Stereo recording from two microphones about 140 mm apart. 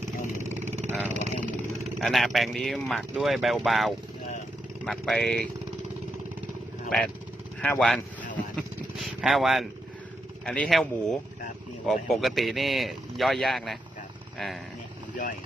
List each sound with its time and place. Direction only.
0.4 s vehicle: 50° right (ahead or behind)
2.0 s speech: centre (ahead or behind)
6.9 s speech: 10° left (ahead or behind)